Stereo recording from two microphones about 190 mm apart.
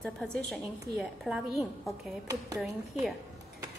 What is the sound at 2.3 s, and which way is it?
Speech, 15° right (ahead or behind).